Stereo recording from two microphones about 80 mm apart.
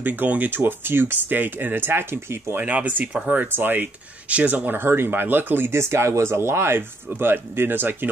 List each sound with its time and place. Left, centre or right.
0.0 s speech: right